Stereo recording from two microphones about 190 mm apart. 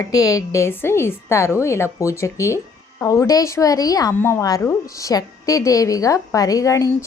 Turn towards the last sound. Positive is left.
turn(degrees=15)  # may be behind; listen again after turning